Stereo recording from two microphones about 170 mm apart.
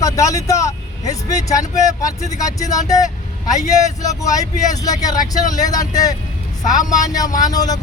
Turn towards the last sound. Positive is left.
turn(degrees=20)  # may be behind; listen again after turning